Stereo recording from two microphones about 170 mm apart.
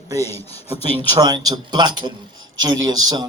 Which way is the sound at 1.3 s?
25° right (ahead or behind).